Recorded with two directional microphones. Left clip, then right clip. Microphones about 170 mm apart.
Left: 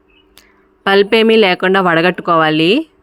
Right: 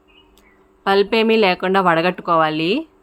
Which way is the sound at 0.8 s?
35° left (ahead or behind).